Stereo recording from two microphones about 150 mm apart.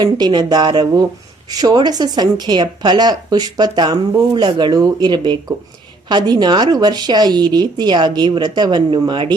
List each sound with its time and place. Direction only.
0.0 s speech: 30° right (ahead or behind)